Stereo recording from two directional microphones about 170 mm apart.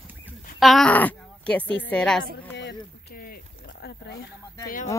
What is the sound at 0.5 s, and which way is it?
A woman's voice, centre (ahead or behind).